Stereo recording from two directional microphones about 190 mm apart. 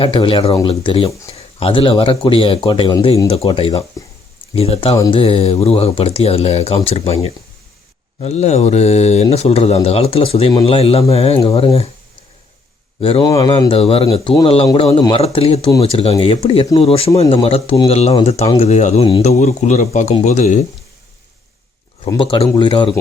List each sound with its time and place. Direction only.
0.0 s speech: 30° left (ahead or behind)
13.0 s speech: 30° left (ahead or behind)
13.3 s speech: 20° left (ahead or behind)
13.7 s speech: 30° left (ahead or behind)
22.1 s speech: 25° left (ahead or behind)